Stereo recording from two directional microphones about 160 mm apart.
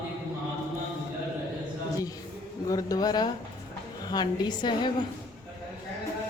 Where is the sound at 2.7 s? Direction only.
20° left (ahead or behind).